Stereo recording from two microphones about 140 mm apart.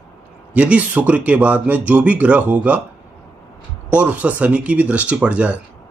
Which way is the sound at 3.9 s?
10° right (ahead or behind).